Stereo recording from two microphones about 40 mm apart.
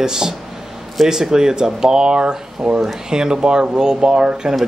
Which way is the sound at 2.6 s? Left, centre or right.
Centre.